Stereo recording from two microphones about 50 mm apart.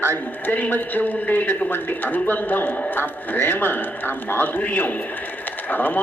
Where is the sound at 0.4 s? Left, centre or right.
Left.